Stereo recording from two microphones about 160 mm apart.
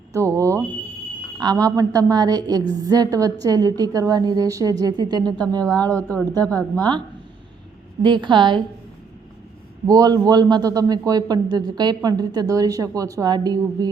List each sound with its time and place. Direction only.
0.1 s a man's voice: 20° right (ahead or behind)
5.9 s a woman's voice: 10° left (ahead or behind)
8.0 s a man's voice: 30° right (ahead or behind)
9.8 s a man's voice: 25° right (ahead or behind)